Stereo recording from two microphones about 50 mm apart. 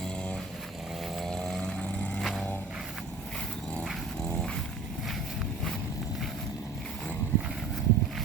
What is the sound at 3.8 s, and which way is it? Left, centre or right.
Dog, centre.